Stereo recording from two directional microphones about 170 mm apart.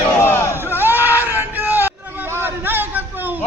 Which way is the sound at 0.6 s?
10° right (ahead or behind).